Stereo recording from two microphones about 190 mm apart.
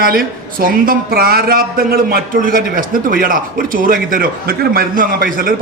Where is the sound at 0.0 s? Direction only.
50° right (ahead or behind).